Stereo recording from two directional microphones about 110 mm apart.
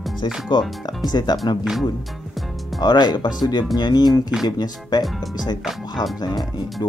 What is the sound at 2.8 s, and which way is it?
Speech, 40° left (ahead or behind).